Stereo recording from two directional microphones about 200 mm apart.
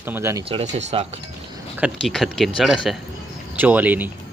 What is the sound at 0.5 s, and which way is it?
Speech, 35° right (ahead or behind).